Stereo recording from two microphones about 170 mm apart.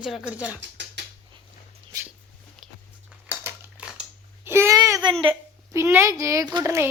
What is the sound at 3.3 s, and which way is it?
Crumpling, 10° right (ahead or behind).